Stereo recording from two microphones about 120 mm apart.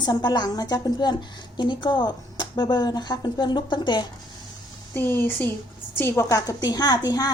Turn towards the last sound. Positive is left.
turn(degrees=35)  # may be behind; listen again after turning